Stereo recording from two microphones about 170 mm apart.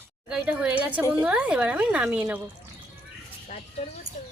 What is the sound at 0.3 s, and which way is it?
Speech, 5° right (ahead or behind).